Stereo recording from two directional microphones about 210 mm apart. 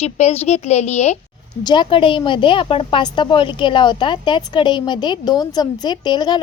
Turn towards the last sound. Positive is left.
turn(degrees=20)  # may be behind; listen again after turning